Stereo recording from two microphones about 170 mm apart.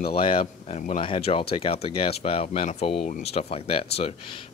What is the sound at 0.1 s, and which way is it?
Speech, 35° left (ahead or behind).